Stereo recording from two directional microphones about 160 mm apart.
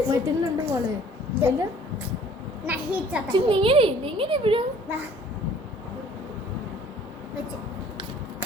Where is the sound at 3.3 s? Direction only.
30° right (ahead or behind).